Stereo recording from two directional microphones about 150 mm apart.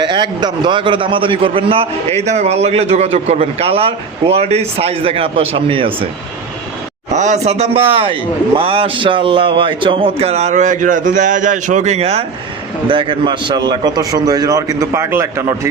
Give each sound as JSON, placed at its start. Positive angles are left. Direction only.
{"t": 0.0, "sound": "a man's voice", "side_deg": -30}
{"t": 7.1, "sound": "a man's voice", "side_deg": -50}